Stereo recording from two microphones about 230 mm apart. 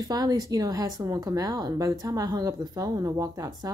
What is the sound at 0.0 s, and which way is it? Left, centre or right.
Speech, centre.